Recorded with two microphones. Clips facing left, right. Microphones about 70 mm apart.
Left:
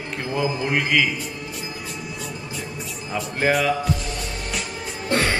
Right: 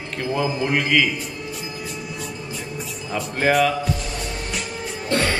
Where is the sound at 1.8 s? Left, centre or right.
Centre.